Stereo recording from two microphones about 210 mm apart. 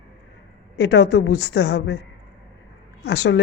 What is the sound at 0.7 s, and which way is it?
A woman's voice, 55° left (ahead or behind).